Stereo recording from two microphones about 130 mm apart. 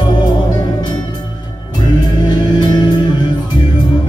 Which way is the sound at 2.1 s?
35° left (ahead or behind).